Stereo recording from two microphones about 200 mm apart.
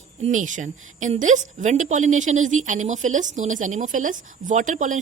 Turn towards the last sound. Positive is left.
turn(degrees=-40)  # may be behind; listen again after turning